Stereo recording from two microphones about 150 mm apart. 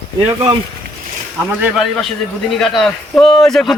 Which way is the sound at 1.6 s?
Centre (ahead or behind).